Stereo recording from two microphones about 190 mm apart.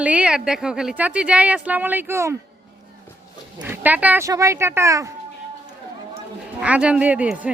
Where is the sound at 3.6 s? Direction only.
10° right (ahead or behind).